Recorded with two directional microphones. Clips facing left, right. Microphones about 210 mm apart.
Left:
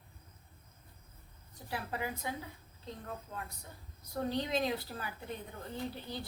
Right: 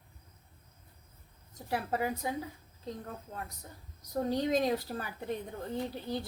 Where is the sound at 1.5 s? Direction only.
45° right (ahead or behind).